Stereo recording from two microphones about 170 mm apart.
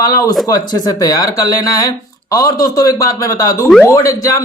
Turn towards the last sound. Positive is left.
turn(degrees=20)  # may be behind; listen again after turning